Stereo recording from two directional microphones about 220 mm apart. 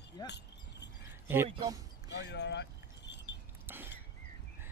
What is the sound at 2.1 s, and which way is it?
Keys jangling, 50° left (ahead or behind).